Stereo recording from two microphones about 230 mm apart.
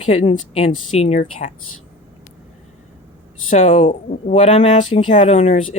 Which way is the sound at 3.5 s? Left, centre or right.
Left.